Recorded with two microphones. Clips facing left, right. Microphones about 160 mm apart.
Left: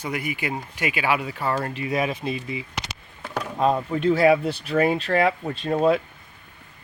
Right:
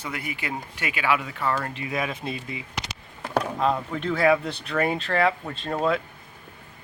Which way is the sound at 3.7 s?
35° left (ahead or behind).